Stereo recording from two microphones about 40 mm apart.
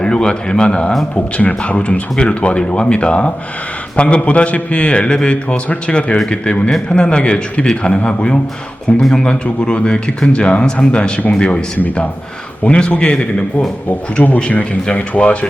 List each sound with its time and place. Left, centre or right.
0.0 s a man's voice: left
12.6 s a man's voice: left
14.2 s speech: left